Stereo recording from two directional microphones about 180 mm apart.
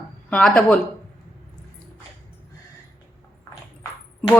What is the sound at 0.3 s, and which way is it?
Speech, 5° left (ahead or behind).